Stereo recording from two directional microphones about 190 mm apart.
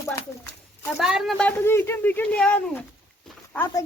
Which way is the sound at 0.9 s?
Centre (ahead or behind).